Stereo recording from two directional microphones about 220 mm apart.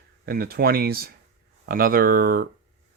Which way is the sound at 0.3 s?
45° right (ahead or behind).